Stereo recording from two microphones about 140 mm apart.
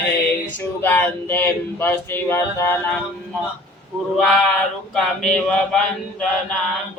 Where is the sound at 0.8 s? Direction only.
15° left (ahead or behind).